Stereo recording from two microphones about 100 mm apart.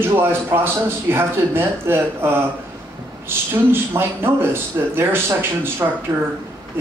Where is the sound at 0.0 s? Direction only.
25° right (ahead or behind).